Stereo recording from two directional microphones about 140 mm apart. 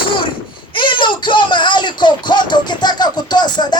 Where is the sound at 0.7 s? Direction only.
35° left (ahead or behind).